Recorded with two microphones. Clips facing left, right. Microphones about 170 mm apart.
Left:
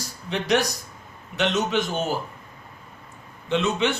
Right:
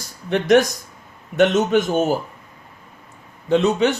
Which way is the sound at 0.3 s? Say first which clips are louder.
Right 8 dB; 50° right (ahead or behind).